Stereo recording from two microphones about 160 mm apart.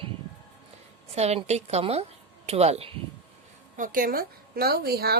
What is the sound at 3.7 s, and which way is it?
A woman's voice, 60° right (ahead or behind).